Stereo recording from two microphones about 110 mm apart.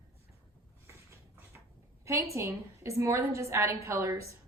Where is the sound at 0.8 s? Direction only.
25° right (ahead or behind).